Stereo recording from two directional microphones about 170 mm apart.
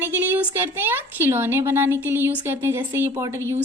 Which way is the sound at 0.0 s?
10° right (ahead or behind).